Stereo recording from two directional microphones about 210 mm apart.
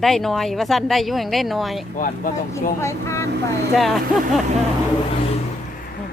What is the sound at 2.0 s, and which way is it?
Speech, 40° left (ahead or behind).